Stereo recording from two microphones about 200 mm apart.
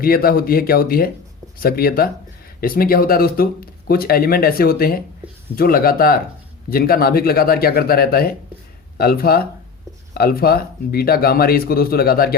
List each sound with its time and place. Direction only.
0.0 s speech: 50° left (ahead or behind)